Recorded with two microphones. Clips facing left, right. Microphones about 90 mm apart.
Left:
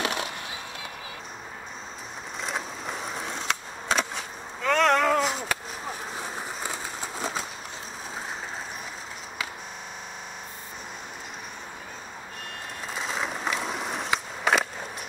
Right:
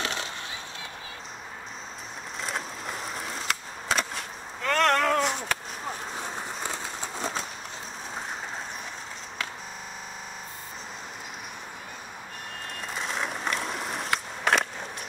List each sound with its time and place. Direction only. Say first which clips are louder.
0.0 s skateboard: left 3 dB; 20° left (ahead or behind)
2.4 s skateboard: left 1 dB; centre (ahead or behind)
12.9 s skateboard: left 1 dB; centre (ahead or behind)